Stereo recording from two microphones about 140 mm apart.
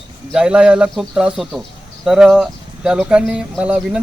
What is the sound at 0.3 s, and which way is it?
Speech, 5° right (ahead or behind).